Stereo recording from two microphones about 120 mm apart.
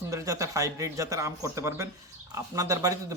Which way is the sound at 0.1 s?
25° right (ahead or behind).